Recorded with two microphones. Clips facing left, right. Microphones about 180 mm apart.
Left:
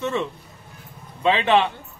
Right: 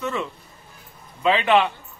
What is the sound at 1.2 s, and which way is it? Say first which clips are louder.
Speech: even; 30° left (ahead or behind).